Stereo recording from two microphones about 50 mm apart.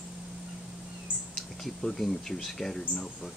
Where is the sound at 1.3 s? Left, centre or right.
Centre.